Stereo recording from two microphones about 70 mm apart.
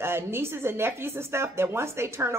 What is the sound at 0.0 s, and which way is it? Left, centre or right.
Speech, right.